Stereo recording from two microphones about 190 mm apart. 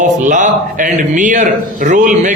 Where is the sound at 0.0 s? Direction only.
40° right (ahead or behind).